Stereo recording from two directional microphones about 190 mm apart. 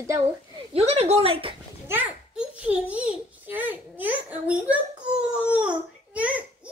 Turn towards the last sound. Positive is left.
turn(degrees=-5)  # may be behind; listen again after turning